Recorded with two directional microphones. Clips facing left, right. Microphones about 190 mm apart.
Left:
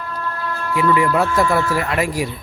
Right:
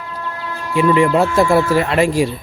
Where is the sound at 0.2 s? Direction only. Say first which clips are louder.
Left 1 dB; 15° right (ahead or behind).